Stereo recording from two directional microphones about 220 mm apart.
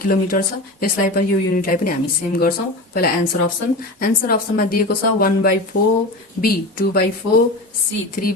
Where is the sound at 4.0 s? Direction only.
40° left (ahead or behind).